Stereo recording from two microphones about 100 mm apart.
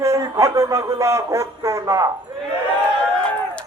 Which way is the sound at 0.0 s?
30° right (ahead or behind).